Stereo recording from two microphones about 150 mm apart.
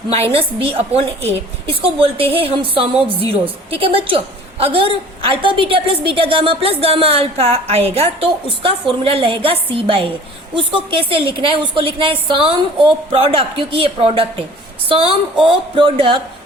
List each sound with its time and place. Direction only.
0.3 s a woman's voice: 40° right (ahead or behind)